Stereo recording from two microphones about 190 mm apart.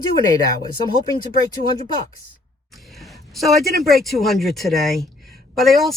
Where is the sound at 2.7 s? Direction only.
Centre (ahead or behind).